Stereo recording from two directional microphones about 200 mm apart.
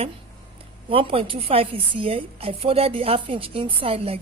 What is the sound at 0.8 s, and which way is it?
A woman's voice, 25° right (ahead or behind).